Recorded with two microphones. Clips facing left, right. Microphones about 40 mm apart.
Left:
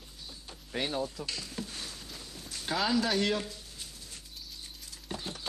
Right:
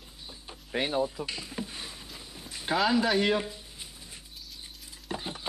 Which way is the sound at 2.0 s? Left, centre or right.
Centre.